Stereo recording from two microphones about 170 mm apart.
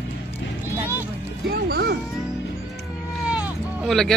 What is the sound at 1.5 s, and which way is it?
Music, 65° right (ahead or behind).